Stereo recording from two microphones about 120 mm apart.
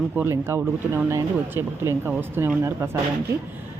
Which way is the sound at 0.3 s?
20° right (ahead or behind).